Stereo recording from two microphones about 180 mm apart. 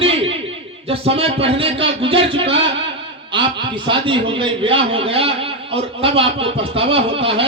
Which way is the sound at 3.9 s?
30° right (ahead or behind).